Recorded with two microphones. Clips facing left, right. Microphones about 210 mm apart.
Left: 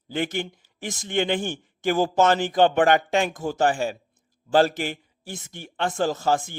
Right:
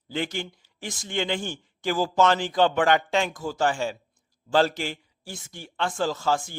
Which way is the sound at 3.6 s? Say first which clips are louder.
Left 3 dB; 15° left (ahead or behind).